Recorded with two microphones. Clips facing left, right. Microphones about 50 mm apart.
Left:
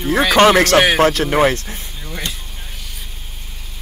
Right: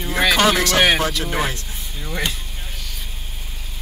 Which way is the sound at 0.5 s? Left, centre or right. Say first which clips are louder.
Left 5 dB; left.